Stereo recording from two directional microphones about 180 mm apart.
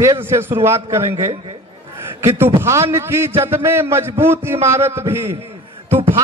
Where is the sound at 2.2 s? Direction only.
15° right (ahead or behind).